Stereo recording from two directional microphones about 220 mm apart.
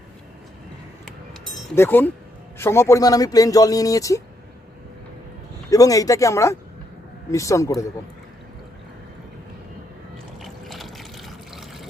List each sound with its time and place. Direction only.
1.7 s speech: 10° left (ahead or behind)
5.7 s speech: 15° left (ahead or behind)
10.4 s water: centre (ahead or behind)